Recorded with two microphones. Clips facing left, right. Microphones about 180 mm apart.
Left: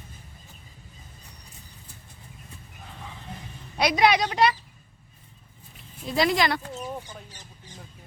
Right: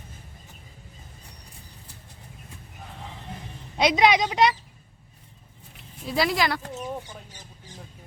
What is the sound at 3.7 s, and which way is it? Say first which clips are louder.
Speech: right 1 dB; 20° right (ahead or behind).